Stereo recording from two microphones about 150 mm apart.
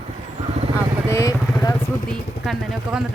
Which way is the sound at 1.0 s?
20° left (ahead or behind).